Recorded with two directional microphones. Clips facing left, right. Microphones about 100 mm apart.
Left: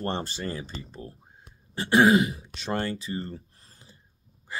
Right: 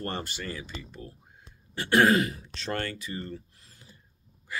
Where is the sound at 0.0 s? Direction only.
30° left (ahead or behind).